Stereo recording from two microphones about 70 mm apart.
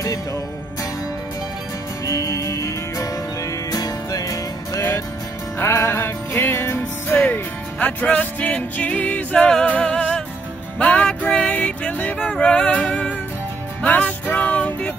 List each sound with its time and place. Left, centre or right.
0.0 s music: left
2.0 s music: left
5.6 s music: left